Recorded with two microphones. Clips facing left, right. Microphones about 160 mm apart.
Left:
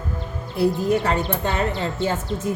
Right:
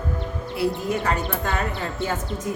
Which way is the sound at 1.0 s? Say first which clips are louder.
Left 2 dB; 30° left (ahead or behind).